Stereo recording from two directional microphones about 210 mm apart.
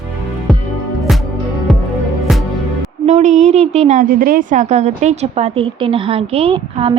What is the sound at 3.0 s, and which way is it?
A woman's voice, 35° right (ahead or behind).